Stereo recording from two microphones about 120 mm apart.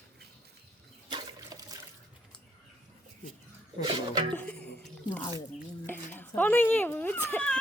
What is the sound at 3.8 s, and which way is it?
Speech, 40° right (ahead or behind).